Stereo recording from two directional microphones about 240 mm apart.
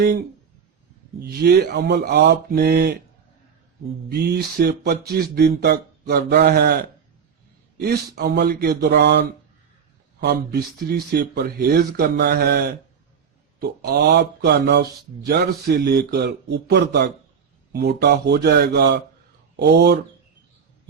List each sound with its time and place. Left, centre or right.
1.2 s speech: right
4.1 s a man's voice: right